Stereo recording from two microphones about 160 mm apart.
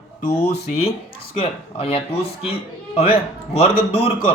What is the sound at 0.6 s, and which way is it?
Speech, 40° left (ahead or behind).